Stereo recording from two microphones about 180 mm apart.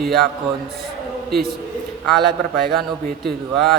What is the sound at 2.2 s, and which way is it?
A man's voice, 65° right (ahead or behind).